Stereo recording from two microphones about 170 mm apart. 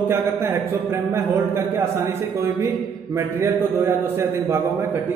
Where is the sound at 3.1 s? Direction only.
15° right (ahead or behind).